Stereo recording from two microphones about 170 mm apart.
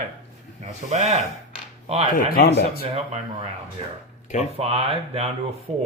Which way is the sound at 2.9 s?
35° right (ahead or behind).